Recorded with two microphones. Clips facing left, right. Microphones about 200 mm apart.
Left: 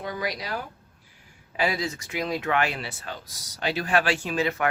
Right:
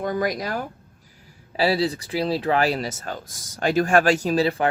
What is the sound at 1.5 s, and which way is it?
Speech, 35° right (ahead or behind).